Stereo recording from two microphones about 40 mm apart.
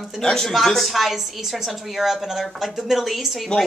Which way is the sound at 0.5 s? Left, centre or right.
Centre.